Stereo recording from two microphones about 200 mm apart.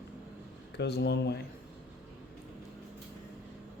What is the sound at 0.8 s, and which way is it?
Speech, 55° left (ahead or behind).